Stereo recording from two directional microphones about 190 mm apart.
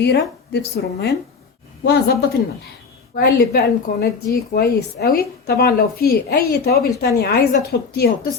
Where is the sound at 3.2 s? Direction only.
55° left (ahead or behind).